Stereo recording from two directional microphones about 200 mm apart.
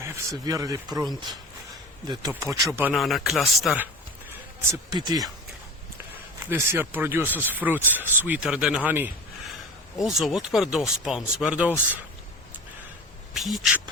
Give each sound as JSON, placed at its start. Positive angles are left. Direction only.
{"t": 0.0, "sound": "speech", "side_deg": -15}
{"t": 2.3, "sound": "speech", "side_deg": -15}
{"t": 4.7, "sound": "speech", "side_deg": -20}
{"t": 6.5, "sound": "speech", "side_deg": -10}
{"t": 13.3, "sound": "speech", "side_deg": 0}